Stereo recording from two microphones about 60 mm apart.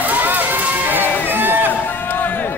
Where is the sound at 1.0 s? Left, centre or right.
Left.